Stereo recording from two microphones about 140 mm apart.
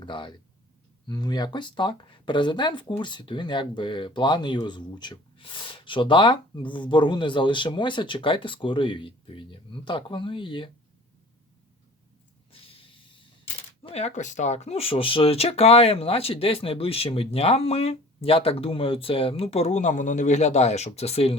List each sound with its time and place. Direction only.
0.0 s speech: 35° left (ahead or behind)
12.5 s a sound: 40° left (ahead or behind)
13.8 s speech: 50° left (ahead or behind)